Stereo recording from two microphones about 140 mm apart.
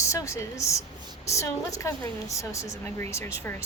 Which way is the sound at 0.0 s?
20° left (ahead or behind).